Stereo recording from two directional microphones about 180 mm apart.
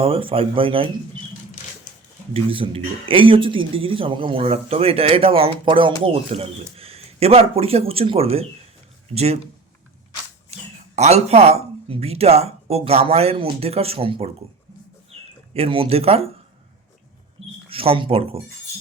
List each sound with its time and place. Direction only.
0.0 s speech: 30° right (ahead or behind)
2.3 s speech: 30° right (ahead or behind)
10.9 s speech: 35° right (ahead or behind)
15.5 s speech: 30° right (ahead or behind)
17.7 s speech: 30° right (ahead or behind)